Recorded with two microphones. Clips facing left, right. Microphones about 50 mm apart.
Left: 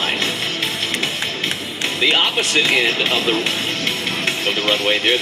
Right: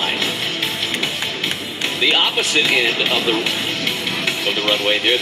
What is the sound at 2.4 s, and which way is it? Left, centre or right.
Speech, centre.